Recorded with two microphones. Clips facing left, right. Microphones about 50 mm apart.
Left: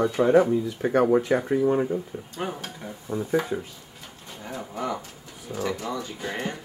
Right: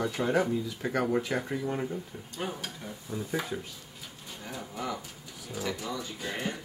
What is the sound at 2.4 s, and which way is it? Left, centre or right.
Speech, centre.